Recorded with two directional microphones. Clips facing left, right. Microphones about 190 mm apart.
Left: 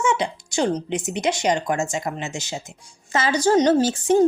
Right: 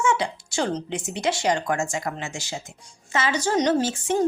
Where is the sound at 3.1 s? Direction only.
35° left (ahead or behind).